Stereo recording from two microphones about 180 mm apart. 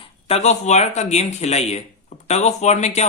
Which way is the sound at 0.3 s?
35° left (ahead or behind).